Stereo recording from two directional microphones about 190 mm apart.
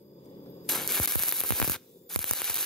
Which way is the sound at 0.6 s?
Centre (ahead or behind).